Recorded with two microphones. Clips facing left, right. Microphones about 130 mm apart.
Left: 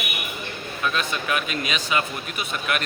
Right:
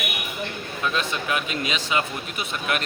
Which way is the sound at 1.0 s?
25° right (ahead or behind).